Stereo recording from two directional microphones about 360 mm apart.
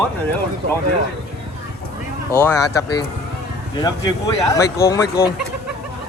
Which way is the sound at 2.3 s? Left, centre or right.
Centre.